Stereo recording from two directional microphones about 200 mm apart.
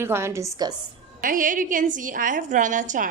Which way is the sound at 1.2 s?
40° right (ahead or behind).